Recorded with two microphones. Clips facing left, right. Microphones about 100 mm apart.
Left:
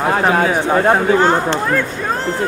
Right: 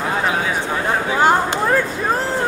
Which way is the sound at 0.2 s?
55° left (ahead or behind).